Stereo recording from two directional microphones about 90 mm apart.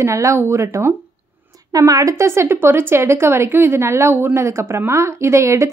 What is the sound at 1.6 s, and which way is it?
A woman's voice, 40° right (ahead or behind).